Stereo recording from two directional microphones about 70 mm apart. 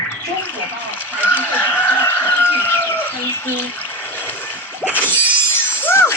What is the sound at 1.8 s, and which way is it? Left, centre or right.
Chicken, left.